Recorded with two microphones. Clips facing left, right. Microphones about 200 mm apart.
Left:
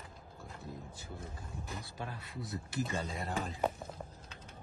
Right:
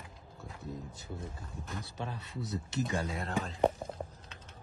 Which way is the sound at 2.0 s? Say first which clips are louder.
Right 3 dB; 25° right (ahead or behind).